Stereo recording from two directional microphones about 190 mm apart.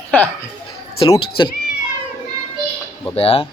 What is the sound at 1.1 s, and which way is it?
Speech, 25° left (ahead or behind).